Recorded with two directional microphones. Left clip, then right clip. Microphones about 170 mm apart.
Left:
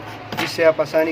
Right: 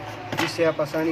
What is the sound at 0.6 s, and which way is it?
Speech, 35° left (ahead or behind).